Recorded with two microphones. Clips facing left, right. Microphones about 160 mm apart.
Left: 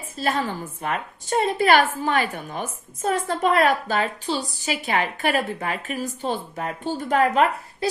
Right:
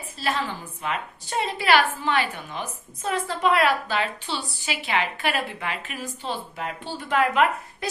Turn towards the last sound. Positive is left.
turn(degrees=40)  # may be behind; listen again after turning